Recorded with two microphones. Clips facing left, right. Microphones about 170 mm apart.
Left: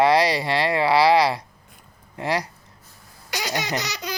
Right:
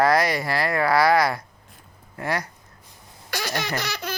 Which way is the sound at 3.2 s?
15° left (ahead or behind).